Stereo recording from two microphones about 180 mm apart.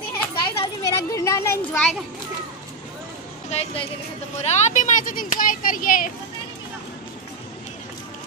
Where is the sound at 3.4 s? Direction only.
35° left (ahead or behind); by 6.0 s 50° left (ahead or behind).